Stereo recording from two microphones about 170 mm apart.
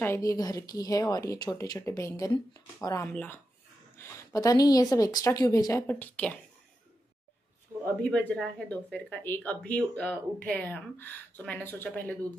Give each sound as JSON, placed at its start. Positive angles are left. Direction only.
{"t": 0.0, "sound": "speech", "side_deg": 15}
{"t": 8.0, "sound": "speech", "side_deg": 5}